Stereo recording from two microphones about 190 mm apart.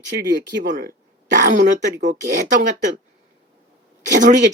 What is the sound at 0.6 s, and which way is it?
Speech, 55° right (ahead or behind).